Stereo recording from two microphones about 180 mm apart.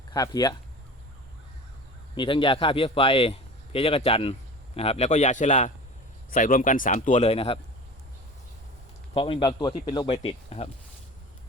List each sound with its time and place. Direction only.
0.1 s speech: 20° left (ahead or behind)
2.1 s a man's voice: 30° left (ahead or behind)
9.1 s speech: 30° left (ahead or behind)